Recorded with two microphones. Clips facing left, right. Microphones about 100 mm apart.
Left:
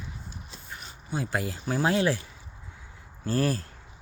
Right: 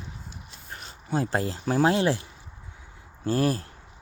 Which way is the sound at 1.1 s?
35° right (ahead or behind).